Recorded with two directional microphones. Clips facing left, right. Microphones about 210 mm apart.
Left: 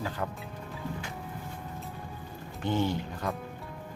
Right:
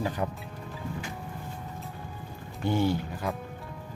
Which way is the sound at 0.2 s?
15° right (ahead or behind).